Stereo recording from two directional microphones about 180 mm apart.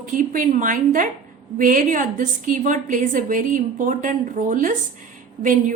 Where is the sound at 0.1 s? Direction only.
45° right (ahead or behind).